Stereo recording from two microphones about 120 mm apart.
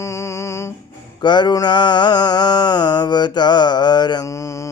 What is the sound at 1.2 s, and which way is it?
Mantra, 40° left (ahead or behind).